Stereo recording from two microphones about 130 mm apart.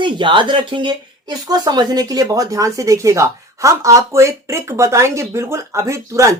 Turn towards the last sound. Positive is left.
turn(degrees=-25)  # may be behind; listen again after turning